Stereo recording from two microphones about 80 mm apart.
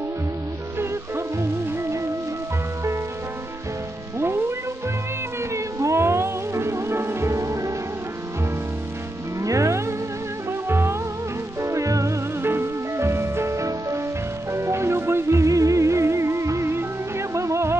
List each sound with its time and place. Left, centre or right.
0.7 s music: right
4.2 s music: right
5.8 s music: right
9.4 s music: right
11.6 s music: right